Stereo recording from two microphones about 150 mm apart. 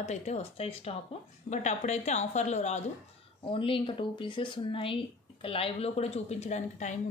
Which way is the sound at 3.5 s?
35° left (ahead or behind).